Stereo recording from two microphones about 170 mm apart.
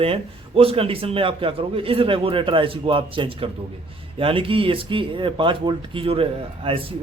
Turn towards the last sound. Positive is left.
turn(degrees=-30)  # may be behind; listen again after turning